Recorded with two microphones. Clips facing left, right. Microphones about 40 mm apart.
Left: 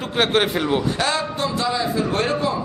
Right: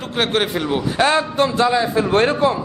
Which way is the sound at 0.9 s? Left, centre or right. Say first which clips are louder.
Right 6 dB; right.